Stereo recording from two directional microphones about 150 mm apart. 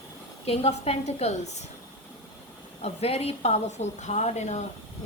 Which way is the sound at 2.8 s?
45° left (ahead or behind).